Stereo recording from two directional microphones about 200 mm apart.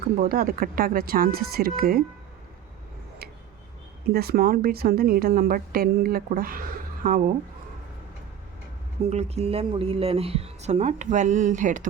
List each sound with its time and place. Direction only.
0.2 s speech: 45° right (ahead or behind)
4.1 s speech: 50° right (ahead or behind)
9.0 s speech: 35° right (ahead or behind)